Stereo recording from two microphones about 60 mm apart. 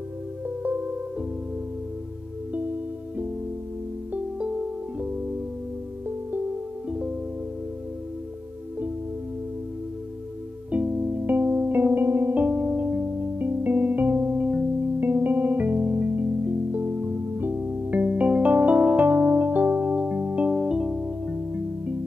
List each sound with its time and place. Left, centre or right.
4.1 s music: centre
6.9 s music: centre
10.7 s music: right